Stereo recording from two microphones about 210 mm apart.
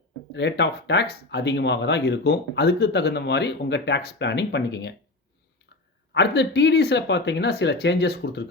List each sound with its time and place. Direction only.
0.3 s speech: 55° left (ahead or behind)
6.1 s speech: 55° left (ahead or behind)